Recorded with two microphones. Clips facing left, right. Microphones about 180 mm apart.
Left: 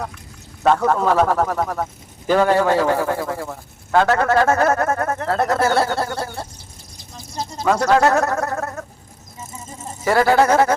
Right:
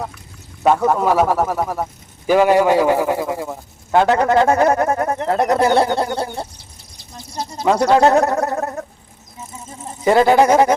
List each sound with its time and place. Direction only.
0.6 s a man's voice: 10° right (ahead or behind)
10.0 s a man's voice: 20° right (ahead or behind)